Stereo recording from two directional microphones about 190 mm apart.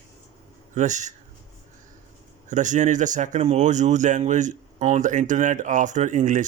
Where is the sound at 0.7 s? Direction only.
40° right (ahead or behind).